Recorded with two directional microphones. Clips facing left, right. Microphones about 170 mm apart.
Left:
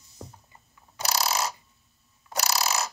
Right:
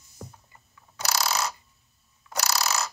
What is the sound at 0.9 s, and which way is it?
Mechanisms, 25° left (ahead or behind).